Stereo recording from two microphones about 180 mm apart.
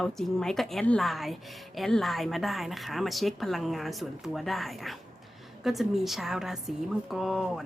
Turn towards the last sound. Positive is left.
turn(degrees=0)  # may be behind; listen again after turning